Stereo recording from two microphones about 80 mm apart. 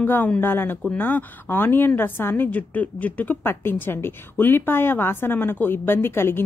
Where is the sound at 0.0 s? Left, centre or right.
Left.